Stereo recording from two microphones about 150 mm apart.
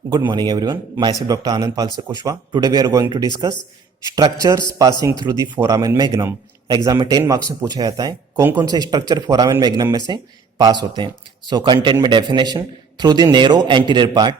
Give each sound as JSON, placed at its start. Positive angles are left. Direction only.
{"t": 0.3, "sound": "a man's voice", "side_deg": -30}